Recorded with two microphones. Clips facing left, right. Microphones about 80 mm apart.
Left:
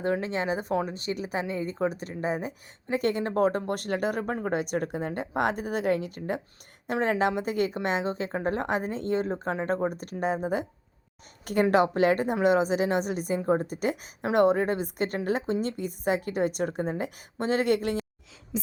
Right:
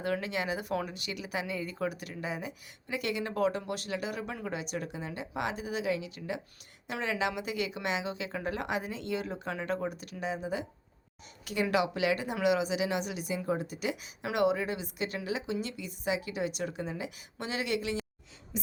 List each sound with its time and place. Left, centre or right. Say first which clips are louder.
0.0 s a woman's voice: left 5 dB; left